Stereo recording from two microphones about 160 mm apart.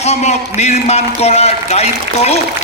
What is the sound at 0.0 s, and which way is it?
A man's voice, 45° left (ahead or behind).